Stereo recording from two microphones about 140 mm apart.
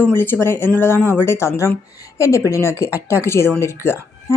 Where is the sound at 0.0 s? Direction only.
15° left (ahead or behind).